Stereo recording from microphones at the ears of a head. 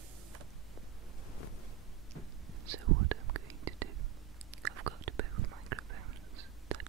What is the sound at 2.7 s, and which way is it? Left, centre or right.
Whispering, right.